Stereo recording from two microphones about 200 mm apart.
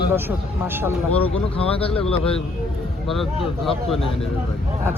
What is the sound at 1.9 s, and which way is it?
Speech, 5° left (ahead or behind).